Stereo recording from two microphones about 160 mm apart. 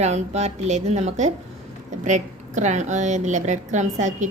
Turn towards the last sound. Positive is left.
turn(degrees=-50)  # may be behind; listen again after turning